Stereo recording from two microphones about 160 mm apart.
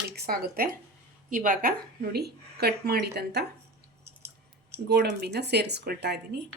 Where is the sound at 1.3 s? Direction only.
55° right (ahead or behind); by 3.4 s 85° right.